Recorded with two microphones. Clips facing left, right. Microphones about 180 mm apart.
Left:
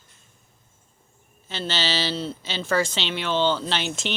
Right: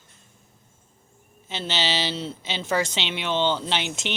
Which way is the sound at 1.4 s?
20° right (ahead or behind).